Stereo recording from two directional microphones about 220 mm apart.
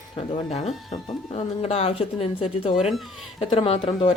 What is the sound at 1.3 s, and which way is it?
Speech, 30° left (ahead or behind).